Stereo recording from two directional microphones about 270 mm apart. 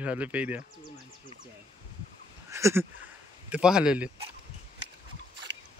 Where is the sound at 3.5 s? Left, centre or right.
Centre.